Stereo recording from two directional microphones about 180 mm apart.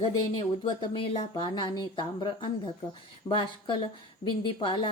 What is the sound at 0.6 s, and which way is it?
Speech, 30° left (ahead or behind).